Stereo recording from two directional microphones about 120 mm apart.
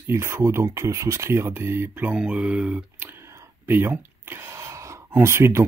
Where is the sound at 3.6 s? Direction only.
15° right (ahead or behind).